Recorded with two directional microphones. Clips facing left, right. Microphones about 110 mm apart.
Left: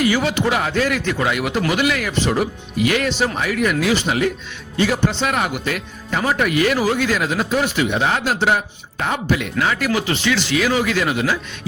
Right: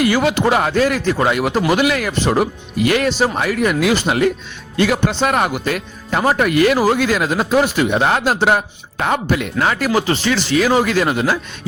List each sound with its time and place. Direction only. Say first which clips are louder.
0.0 s speech: right 3 dB; 45° right (ahead or behind)
4.8 s speech: right 2 dB; 75° right (ahead or behind)
5.2 s speech: right 4 dB; 45° right (ahead or behind)
9.3 s speech: right 2 dB; 45° right (ahead or behind)